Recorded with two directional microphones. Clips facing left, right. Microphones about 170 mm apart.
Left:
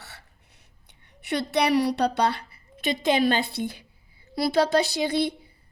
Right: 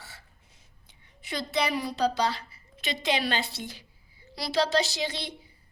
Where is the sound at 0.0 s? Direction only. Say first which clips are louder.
Left 2 dB; 70° left (ahead or behind).